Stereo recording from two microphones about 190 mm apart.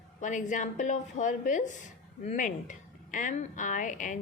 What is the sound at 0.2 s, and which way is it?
A woman's voice, 40° left (ahead or behind).